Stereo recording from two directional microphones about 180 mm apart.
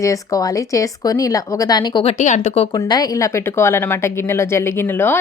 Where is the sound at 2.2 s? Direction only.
40° left (ahead or behind).